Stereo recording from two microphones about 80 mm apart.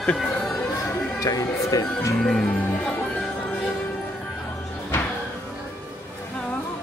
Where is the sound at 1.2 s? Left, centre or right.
Left.